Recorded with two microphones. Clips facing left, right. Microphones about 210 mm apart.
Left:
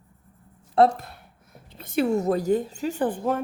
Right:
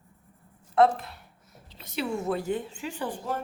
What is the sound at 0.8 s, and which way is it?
A woman's voice, 45° left (ahead or behind).